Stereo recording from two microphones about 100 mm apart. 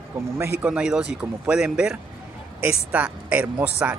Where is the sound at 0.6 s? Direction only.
10° right (ahead or behind).